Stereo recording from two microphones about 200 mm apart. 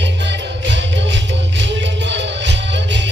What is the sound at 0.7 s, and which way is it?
Music, 65° right (ahead or behind).